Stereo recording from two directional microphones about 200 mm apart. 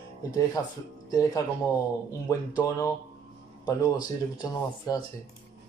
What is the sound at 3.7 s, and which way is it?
Speech, 20° left (ahead or behind).